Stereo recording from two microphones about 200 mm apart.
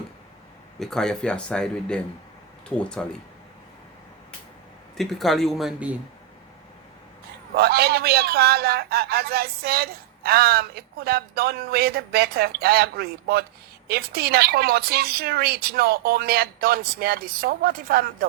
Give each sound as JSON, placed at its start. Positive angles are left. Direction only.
{"t": 0.8, "sound": "speech", "side_deg": 5}
{"t": 4.9, "sound": "speech", "side_deg": 0}
{"t": 7.5, "sound": "a man's voice", "side_deg": -50}